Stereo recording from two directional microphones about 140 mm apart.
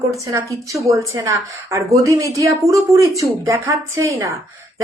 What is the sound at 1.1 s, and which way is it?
Speech, 25° right (ahead or behind).